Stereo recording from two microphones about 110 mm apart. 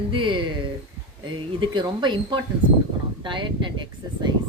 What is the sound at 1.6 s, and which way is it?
Speech, 45° right (ahead or behind).